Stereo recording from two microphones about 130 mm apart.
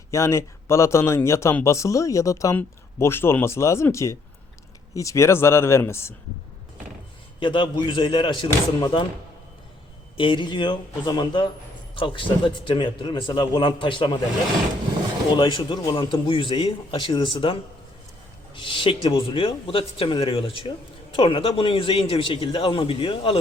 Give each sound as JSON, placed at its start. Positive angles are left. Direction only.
{"t": 0.1, "sound": "speech", "side_deg": 20}
{"t": 7.3, "sound": "a man's voice", "side_deg": 40}
{"t": 10.2, "sound": "a man's voice", "side_deg": 40}
{"t": 15.3, "sound": "a man's voice", "side_deg": 35}